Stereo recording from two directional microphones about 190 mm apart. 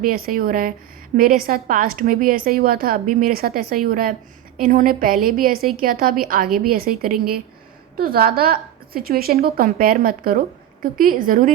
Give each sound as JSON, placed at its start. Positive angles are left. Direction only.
{"t": 0.0, "sound": "a woman's voice", "side_deg": -50}